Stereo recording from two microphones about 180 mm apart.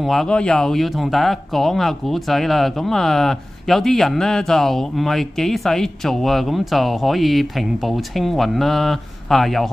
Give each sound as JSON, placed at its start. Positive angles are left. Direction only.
{"t": 0.0, "sound": "speech", "side_deg": 0}